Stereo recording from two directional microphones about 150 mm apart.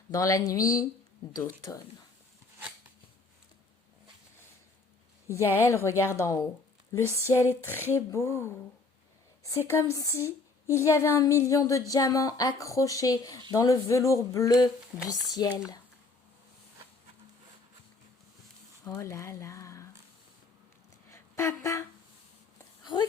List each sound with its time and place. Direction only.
0.1 s a woman's voice: 20° left (ahead or behind)
5.5 s female singing: 20° left (ahead or behind)
7.9 s a woman's voice: 20° left (ahead or behind)
9.6 s a woman's voice: 20° left (ahead or behind)
18.9 s speech: 20° left (ahead or behind)
21.1 s a sound: 20° left (ahead or behind)
22.8 s dog: 30° left (ahead or behind)